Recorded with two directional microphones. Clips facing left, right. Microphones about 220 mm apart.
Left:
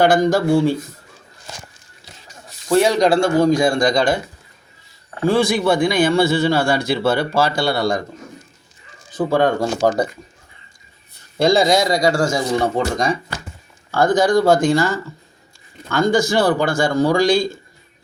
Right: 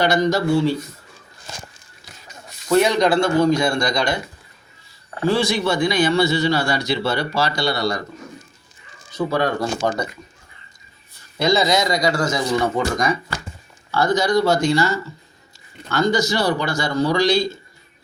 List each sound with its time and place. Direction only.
0.0 s speech: 50° left (ahead or behind)
2.6 s speech: 30° left (ahead or behind); by 4.2 s 50° left (ahead or behind)
5.2 s speech: 55° left (ahead or behind)
9.1 s speech: 50° left (ahead or behind)
11.3 s speech: 45° left (ahead or behind)
12.5 s speech: 30° left (ahead or behind)
13.9 s speech: 50° left (ahead or behind)